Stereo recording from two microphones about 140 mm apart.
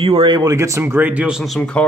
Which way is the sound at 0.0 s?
40° right (ahead or behind).